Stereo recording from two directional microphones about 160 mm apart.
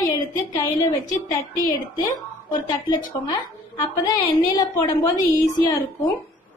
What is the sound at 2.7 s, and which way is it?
A woman's voice, 25° left (ahead or behind).